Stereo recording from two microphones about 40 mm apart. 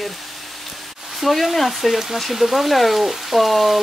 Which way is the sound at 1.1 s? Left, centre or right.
Centre.